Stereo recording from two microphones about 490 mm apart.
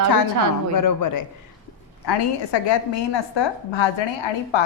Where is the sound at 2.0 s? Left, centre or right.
Left.